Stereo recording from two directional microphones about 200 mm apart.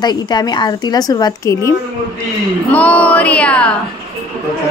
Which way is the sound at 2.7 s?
5° left (ahead or behind).